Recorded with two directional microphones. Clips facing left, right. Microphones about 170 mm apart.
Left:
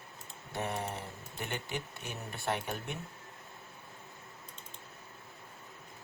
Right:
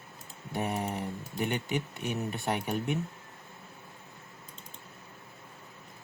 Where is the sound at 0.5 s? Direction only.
5° right (ahead or behind).